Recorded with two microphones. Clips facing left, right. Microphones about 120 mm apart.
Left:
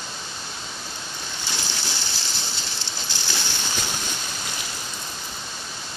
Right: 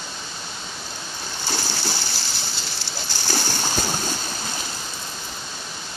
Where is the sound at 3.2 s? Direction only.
45° right (ahead or behind).